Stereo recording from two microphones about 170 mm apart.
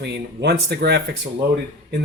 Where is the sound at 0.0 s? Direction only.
75° right (ahead or behind).